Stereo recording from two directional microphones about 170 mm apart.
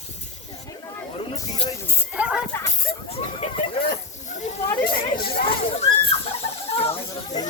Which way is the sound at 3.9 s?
45° left (ahead or behind).